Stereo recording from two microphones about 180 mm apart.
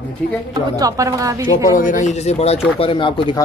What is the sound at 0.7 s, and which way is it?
Speech, 20° right (ahead or behind).